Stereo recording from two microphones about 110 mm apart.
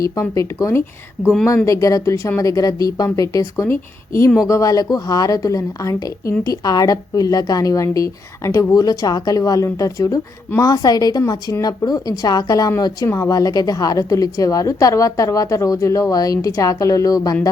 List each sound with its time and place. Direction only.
0.0 s speech: 30° left (ahead or behind)
1.2 s speech: 5° left (ahead or behind)
1.6 s a woman's voice: 30° left (ahead or behind)